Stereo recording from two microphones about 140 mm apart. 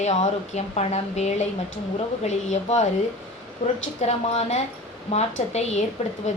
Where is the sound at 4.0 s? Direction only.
50° left (ahead or behind).